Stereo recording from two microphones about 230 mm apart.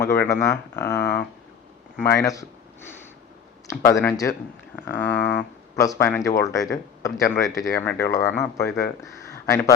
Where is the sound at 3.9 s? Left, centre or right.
Centre.